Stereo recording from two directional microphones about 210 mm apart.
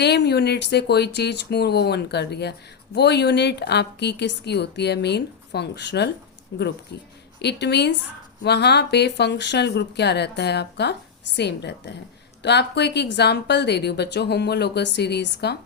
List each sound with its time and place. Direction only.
0.0 s a woman's voice: 50° left (ahead or behind)